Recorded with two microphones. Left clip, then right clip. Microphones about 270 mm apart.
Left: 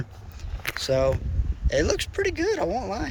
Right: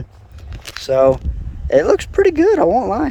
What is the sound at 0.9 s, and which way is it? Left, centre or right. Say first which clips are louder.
Speech: right 11 dB; right.